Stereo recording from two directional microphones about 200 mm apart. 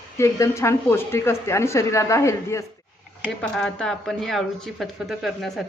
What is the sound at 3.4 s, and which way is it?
Speech, 5° left (ahead or behind).